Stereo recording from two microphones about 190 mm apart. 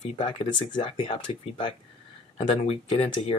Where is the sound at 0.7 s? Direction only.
25° left (ahead or behind).